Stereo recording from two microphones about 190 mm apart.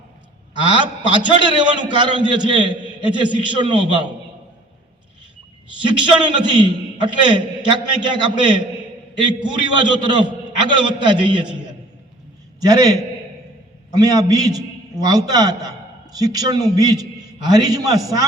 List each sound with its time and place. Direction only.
0.6 s a man's voice: 25° right (ahead or behind)
5.8 s a man's voice: 25° right (ahead or behind)
12.5 s a man's voice: 20° right (ahead or behind)